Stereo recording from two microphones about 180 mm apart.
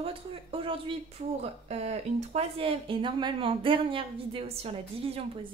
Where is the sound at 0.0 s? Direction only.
30° right (ahead or behind).